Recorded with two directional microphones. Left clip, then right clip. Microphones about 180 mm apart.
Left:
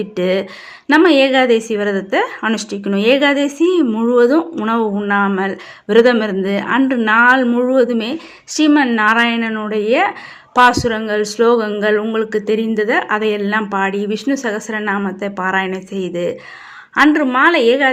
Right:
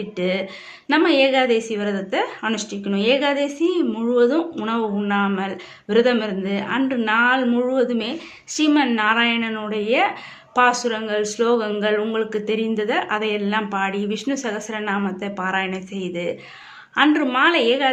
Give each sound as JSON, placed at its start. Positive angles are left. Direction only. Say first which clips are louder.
{"t": 0.2, "sound": "a woman's voice", "louder": "left 6 dB", "side_deg": 40}